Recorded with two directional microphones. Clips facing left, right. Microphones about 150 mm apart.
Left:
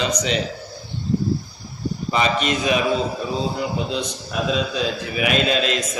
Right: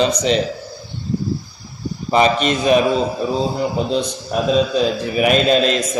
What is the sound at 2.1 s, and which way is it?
Speech, 40° right (ahead or behind).